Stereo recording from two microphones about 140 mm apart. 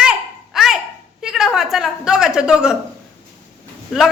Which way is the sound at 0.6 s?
5° right (ahead or behind).